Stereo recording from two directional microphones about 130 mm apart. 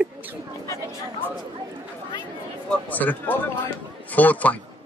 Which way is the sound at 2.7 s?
15° left (ahead or behind).